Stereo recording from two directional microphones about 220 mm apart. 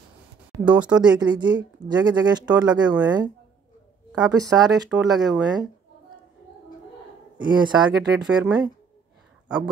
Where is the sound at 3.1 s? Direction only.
20° right (ahead or behind).